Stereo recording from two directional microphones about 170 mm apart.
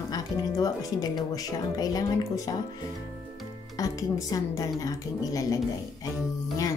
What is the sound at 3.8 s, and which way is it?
Speech, 20° left (ahead or behind).